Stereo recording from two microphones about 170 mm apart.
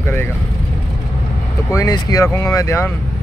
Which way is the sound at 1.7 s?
20° left (ahead or behind).